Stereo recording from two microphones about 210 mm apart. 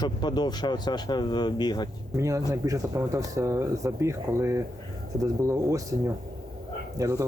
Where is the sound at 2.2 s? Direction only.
15° right (ahead or behind).